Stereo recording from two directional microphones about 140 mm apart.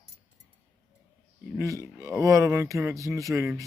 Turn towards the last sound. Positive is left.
turn(degrees=-20)  # may be behind; listen again after turning